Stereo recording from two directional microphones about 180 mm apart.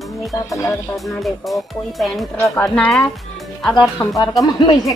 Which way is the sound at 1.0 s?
Centre (ahead or behind).